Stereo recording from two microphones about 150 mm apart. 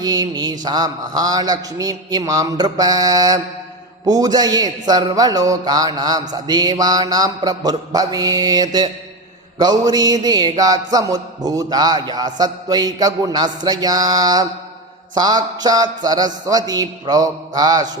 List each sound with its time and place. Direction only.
0.0 s a man's voice: 25° right (ahead or behind)